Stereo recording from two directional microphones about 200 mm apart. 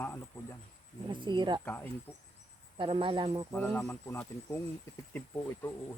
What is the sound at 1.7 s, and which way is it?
Speech, 10° left (ahead or behind).